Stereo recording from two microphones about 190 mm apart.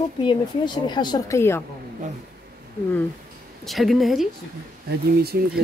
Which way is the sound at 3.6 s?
Centre (ahead or behind).